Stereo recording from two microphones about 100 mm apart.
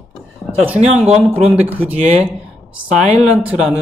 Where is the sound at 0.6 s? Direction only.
10° right (ahead or behind).